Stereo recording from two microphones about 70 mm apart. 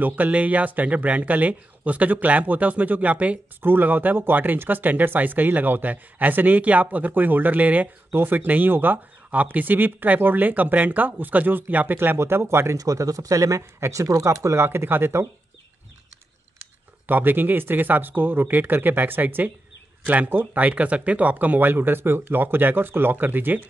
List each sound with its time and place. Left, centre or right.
0.0 s speech: right
12.2 s speech: right
12.7 s speech: right
17.1 s speech: right